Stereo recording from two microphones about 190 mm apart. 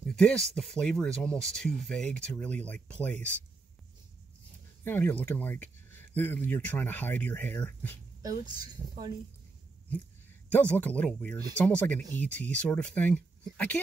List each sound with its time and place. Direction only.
0.1 s speech: 5° left (ahead or behind)
4.8 s speech: 10° left (ahead or behind)
8.2 s a woman's voice: 20° right (ahead or behind)
10.5 s speech: 10° left (ahead or behind)